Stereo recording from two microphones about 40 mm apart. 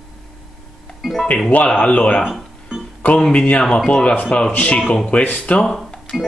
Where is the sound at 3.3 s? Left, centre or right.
Left.